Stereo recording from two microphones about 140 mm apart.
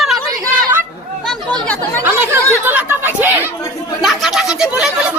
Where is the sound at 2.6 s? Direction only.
15° right (ahead or behind).